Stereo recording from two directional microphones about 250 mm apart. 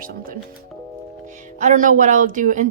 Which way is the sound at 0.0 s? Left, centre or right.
Right.